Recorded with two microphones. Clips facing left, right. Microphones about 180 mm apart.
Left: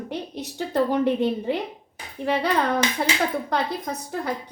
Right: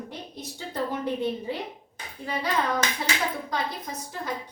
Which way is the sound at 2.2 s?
65° left (ahead or behind).